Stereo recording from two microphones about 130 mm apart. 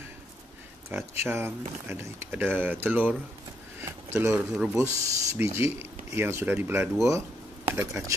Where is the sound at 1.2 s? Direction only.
20° right (ahead or behind).